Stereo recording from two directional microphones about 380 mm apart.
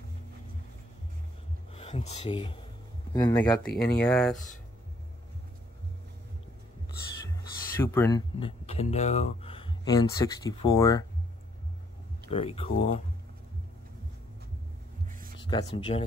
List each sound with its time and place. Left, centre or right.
1.7 s speech: centre
3.7 s speech: left
4.0 s speech: centre
7.8 s speech: centre
12.3 s speech: centre
15.0 s a sound: right
15.4 s speech: centre